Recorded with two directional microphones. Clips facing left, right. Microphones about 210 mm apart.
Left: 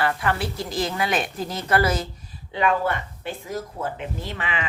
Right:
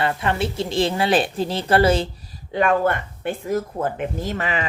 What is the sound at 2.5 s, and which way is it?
A woman's voice, 50° right (ahead or behind).